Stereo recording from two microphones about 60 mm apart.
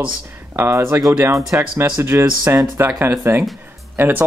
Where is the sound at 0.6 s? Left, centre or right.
Right.